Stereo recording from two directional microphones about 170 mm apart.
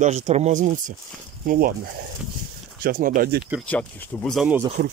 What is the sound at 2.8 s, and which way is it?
Speech, 55° right (ahead or behind).